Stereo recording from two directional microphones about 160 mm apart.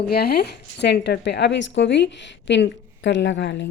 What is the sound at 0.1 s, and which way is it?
Speech, 80° left.